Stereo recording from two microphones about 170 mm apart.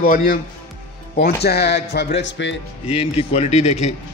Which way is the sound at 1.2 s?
70° left (ahead or behind).